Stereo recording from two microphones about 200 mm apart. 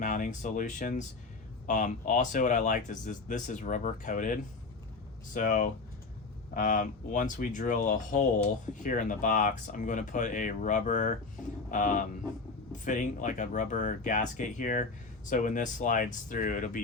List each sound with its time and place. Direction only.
0.0 s speech: 40° left (ahead or behind)